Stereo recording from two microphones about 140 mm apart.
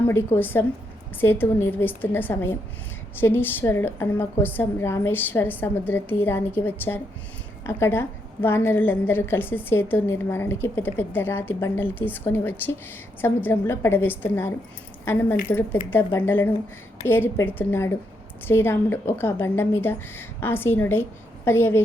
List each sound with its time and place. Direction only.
0.1 s a woman's voice: 15° left (ahead or behind)